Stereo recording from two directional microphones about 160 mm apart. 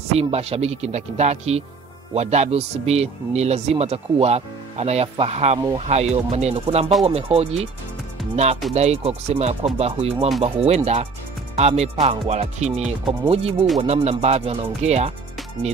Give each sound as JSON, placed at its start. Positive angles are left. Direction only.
{"t": 0.1, "sound": "a man's voice", "side_deg": -40}
{"t": 8.7, "sound": "a man's voice", "side_deg": -40}